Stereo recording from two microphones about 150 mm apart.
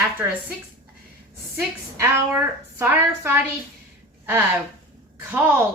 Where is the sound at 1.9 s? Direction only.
20° right (ahead or behind).